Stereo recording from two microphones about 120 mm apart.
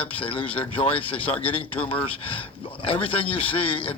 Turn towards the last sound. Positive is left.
turn(degrees=50)  # may be behind; listen again after turning